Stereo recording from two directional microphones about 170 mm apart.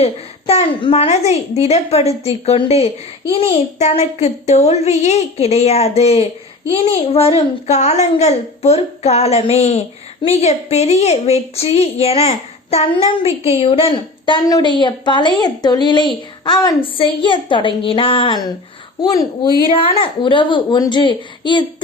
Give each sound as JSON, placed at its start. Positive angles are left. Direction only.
{"t": 0.0, "sound": "a woman's voice", "side_deg": 35}
{"t": 19.7, "sound": "a woman's voice", "side_deg": 30}